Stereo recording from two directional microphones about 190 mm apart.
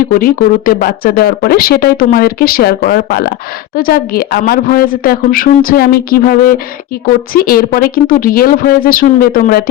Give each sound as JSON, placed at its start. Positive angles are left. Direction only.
{"t": 0.1, "sound": "speech", "side_deg": 45}